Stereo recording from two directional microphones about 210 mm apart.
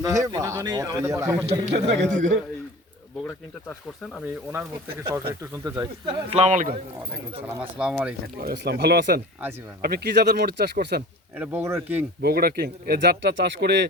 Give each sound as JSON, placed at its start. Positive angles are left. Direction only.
{"t": 0.0, "sound": "a man's voice", "side_deg": -15}
{"t": 1.5, "sound": "a man's voice", "side_deg": -25}
{"t": 2.0, "sound": "speech", "side_deg": -35}
{"t": 5.4, "sound": "a man's voice", "side_deg": -15}
{"t": 6.3, "sound": "speech", "side_deg": -35}
{"t": 7.4, "sound": "speech", "side_deg": -10}
{"t": 8.4, "sound": "speech", "side_deg": -50}
{"t": 11.3, "sound": "a man's voice", "side_deg": -10}
{"t": 12.2, "sound": "speech", "side_deg": -45}